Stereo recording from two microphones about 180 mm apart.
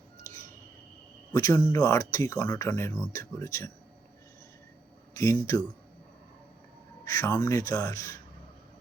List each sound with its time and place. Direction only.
1.3 s speech: 20° left (ahead or behind)
5.1 s speech: 15° left (ahead or behind)
7.0 s speech: 20° left (ahead or behind)